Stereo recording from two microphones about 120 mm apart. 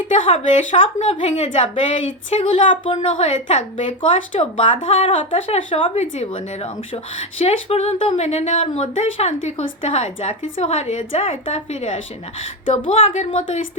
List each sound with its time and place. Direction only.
0.3 s speech: 55° left (ahead or behind)
1.2 s a woman's voice: 80° left; by 3.0 s 45° left (ahead or behind)
3.0 s a woman's voice: 65° left (ahead or behind); by 3.8 s 80° left
3.8 s speech: 50° left (ahead or behind)
4.7 s speech: 80° left
5.0 s speech: 50° left (ahead or behind)
6.0 s a woman's voice: 70° left (ahead or behind); by 8.1 s 55° left (ahead or behind)
8.1 s a woman's voice: 65° left (ahead or behind)
12.6 s speech: 50° left (ahead or behind)